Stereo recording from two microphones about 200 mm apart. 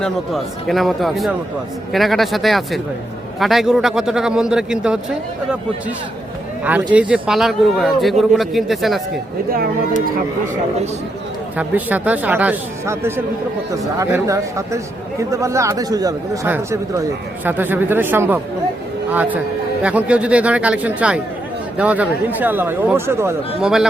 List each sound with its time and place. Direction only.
0.0 s a man's voice: centre (ahead or behind)
6.9 s a man's voice: 5° right (ahead or behind)
11.5 s a man's voice: 10° right (ahead or behind)